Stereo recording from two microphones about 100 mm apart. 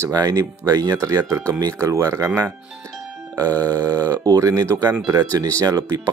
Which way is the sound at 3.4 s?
40° right (ahead or behind).